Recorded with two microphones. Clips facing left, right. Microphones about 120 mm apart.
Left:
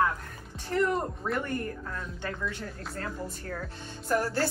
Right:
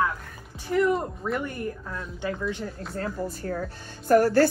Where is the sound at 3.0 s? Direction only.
40° right (ahead or behind).